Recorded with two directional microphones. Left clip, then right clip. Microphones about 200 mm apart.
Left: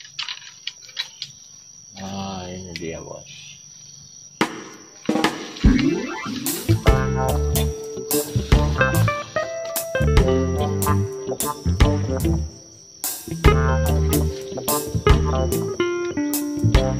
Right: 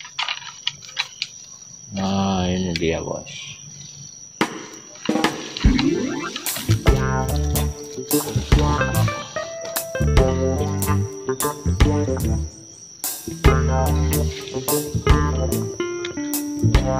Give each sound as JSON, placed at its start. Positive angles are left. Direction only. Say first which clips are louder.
{"t": 0.3, "sound": "a sound", "louder": "right 5 dB", "side_deg": -40}
{"t": 2.0, "sound": "mantra", "louder": "right 8 dB", "side_deg": -50}
{"t": 2.8, "sound": "speech", "louder": "right 9 dB", "side_deg": -55}
{"t": 4.4, "sound": "chop", "louder": "even", "side_deg": 0}
{"t": 5.0, "sound": "music", "louder": "even", "side_deg": 0}